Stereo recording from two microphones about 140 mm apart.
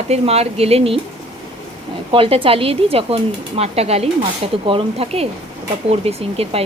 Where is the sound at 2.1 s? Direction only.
40° right (ahead or behind).